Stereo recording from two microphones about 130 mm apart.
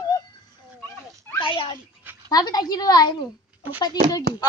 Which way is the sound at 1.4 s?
40° left (ahead or behind).